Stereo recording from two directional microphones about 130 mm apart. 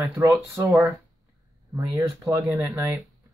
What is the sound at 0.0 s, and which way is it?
Speech, 20° right (ahead or behind).